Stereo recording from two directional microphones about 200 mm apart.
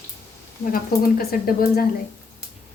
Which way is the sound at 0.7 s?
45° left (ahead or behind).